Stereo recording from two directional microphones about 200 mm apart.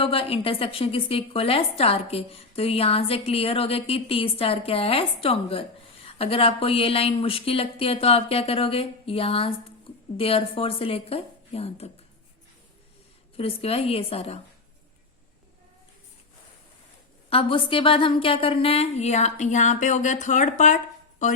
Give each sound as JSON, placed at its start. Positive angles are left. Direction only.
{"t": 0.0, "sound": "a woman's voice", "side_deg": 30}
{"t": 13.3, "sound": "a woman's voice", "side_deg": 30}
{"t": 17.2, "sound": "a woman's voice", "side_deg": 25}